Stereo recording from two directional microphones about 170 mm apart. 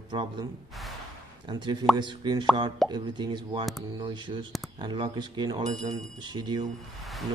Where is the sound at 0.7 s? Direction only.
Centre (ahead or behind).